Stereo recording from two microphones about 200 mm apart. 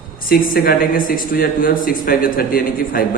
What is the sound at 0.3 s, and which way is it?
A man's voice, 45° left (ahead or behind).